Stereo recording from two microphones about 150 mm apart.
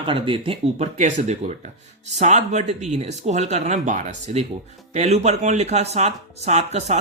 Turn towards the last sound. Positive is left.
turn(degrees=-45)  # may be behind; listen again after turning